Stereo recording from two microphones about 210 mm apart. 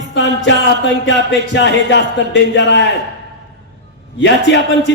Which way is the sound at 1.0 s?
60° left (ahead or behind).